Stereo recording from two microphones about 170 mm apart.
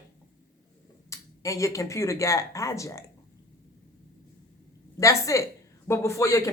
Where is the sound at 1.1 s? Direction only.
20° left (ahead or behind).